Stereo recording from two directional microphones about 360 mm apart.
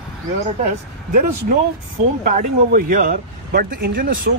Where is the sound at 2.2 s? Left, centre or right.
Right.